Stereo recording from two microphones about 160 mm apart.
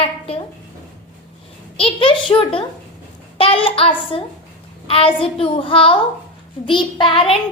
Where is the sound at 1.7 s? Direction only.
35° left (ahead or behind).